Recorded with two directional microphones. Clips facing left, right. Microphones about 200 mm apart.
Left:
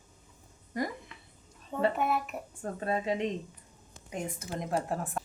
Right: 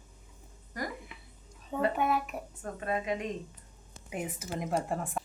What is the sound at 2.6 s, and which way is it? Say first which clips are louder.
Speech: left 2 dB; 30° left (ahead or behind).